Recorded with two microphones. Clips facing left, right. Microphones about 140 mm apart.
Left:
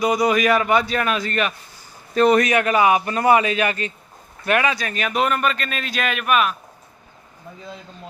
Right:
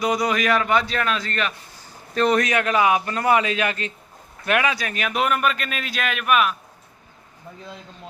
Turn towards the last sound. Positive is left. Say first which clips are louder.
# left 1 dB
turn(degrees=0)  # may be behind; listen again after turning